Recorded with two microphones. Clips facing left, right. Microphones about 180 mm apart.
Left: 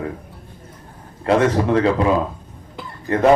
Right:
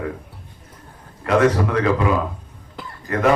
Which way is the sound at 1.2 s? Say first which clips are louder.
Left 1 dB; 30° left (ahead or behind).